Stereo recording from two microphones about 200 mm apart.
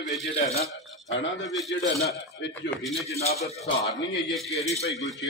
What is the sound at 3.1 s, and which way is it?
Speech, 30° left (ahead or behind).